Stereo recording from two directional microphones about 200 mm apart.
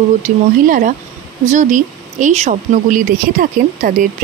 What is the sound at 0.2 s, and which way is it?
Speech, 40° right (ahead or behind).